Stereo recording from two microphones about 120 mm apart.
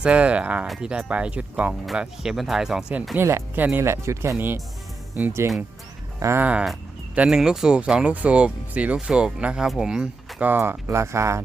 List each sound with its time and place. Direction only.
0.0 s speech: 10° right (ahead or behind)
3.2 s speech: 20° right (ahead or behind)
6.4 s speech: 10° right (ahead or behind)